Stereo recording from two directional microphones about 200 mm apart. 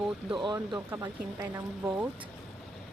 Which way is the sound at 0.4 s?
20° right (ahead or behind).